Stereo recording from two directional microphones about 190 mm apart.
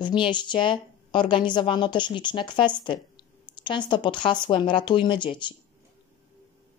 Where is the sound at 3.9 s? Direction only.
25° left (ahead or behind).